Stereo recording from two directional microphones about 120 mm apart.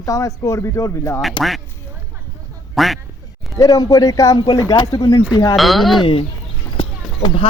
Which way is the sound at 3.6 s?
30° left (ahead or behind).